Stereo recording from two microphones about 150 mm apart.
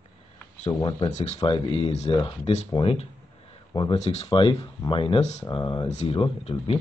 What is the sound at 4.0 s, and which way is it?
Speech, 45° left (ahead or behind).